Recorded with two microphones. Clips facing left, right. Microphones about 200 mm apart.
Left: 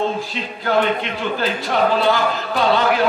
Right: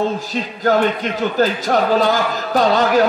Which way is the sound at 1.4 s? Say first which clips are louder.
Right 3 dB; 40° right (ahead or behind).